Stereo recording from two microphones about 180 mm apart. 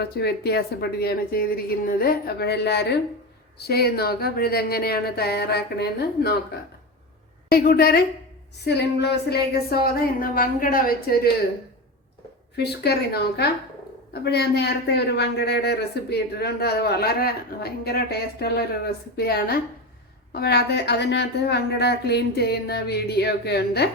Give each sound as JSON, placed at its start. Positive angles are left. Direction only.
{"t": 0.0, "sound": "speech", "side_deg": 65}
{"t": 7.5, "sound": "speech", "side_deg": 55}
{"t": 8.6, "sound": "speech", "side_deg": 70}
{"t": 12.5, "sound": "speech", "side_deg": 65}